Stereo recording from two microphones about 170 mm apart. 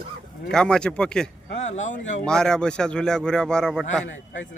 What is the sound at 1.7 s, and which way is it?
Speech, 45° left (ahead or behind).